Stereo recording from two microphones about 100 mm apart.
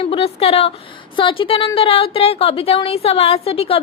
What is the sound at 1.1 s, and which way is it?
A woman's voice, 60° left (ahead or behind).